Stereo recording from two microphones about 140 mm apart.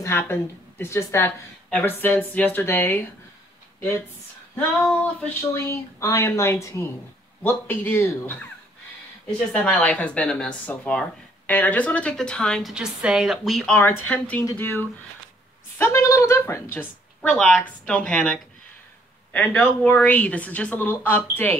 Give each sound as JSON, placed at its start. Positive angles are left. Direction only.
{"t": 0.0, "sound": "a woman's voice", "side_deg": 15}
{"t": 4.6, "sound": "a woman's voice", "side_deg": 10}
{"t": 9.5, "sound": "a woman's voice", "side_deg": 10}
{"t": 16.7, "sound": "speech", "side_deg": 5}